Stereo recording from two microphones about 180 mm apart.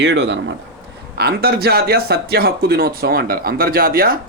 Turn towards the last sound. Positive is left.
turn(degrees=-55)  # may be behind; listen again after turning